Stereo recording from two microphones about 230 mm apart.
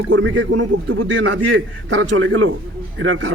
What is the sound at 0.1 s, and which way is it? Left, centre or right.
A man's voice, right.